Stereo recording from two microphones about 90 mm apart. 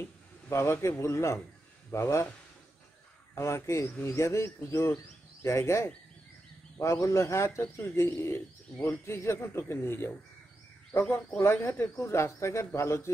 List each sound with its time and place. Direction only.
0.5 s speech: 30° left (ahead or behind)
3.3 s speech: 30° left (ahead or behind)